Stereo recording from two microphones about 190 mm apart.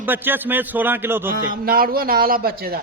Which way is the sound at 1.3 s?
50° right (ahead or behind).